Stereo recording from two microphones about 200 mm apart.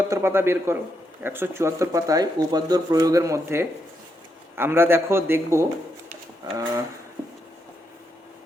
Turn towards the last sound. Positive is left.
turn(degrees=-20)  # may be behind; listen again after turning